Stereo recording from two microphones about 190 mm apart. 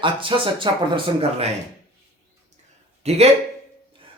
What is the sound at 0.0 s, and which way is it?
Speech, 25° right (ahead or behind).